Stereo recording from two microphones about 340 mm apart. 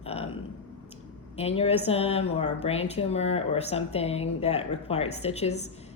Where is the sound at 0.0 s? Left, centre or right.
Centre.